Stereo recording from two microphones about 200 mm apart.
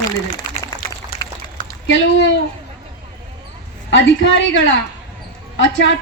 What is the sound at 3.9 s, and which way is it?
A woman's voice, 65° left (ahead or behind).